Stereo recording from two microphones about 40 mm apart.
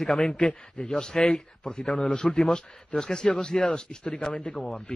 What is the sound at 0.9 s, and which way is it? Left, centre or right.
A man's voice, centre.